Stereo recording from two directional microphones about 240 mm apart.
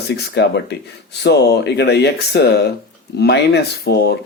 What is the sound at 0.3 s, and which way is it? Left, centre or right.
Speech, left.